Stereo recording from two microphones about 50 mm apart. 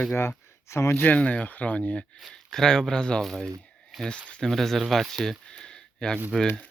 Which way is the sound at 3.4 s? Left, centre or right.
Centre.